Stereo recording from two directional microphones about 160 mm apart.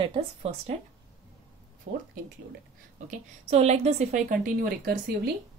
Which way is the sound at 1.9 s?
60° right (ahead or behind).